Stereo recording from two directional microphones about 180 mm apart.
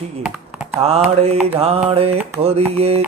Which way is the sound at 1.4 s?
35° right (ahead or behind).